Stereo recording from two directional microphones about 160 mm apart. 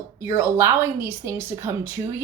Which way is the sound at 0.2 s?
20° right (ahead or behind).